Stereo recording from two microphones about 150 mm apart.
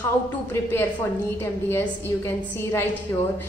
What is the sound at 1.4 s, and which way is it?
A woman's voice, 15° left (ahead or behind).